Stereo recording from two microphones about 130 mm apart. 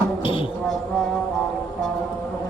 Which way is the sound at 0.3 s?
45° left (ahead or behind).